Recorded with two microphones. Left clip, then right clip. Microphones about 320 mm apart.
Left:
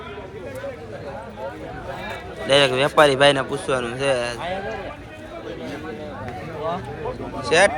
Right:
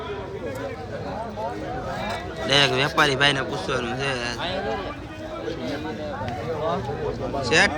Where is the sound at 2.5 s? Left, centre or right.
Centre.